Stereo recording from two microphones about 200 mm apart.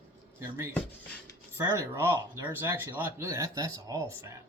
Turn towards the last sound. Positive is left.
turn(degrees=-15)  # may be behind; listen again after turning